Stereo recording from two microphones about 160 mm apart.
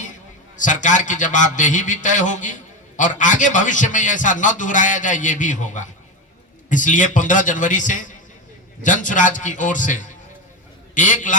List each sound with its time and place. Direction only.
0.5 s a man's voice: 50° left (ahead or behind)